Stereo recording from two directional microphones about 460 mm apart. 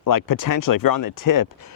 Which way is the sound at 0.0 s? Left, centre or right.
Left.